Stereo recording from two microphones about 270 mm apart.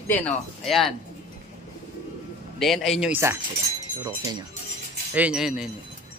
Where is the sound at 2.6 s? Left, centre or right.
Centre.